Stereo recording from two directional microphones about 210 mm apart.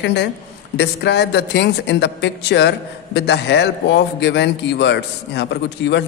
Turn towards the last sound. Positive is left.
turn(degrees=55)  # may be behind; listen again after turning